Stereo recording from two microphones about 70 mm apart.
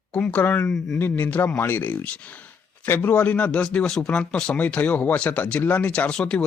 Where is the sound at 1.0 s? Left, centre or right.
Left.